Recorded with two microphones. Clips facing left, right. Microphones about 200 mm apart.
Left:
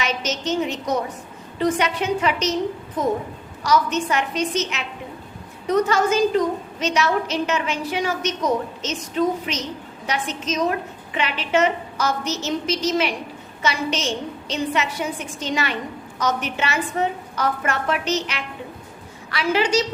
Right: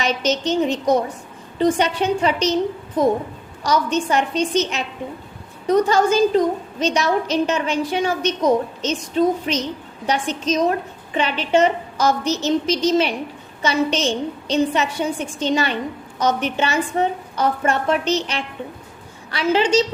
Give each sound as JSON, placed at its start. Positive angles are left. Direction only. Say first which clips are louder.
{"t": 0.0, "sound": "a woman's voice", "louder": "right 5 dB", "side_deg": -30}
{"t": 3.6, "sound": "a woman's voice", "louder": "right 1 dB", "side_deg": -30}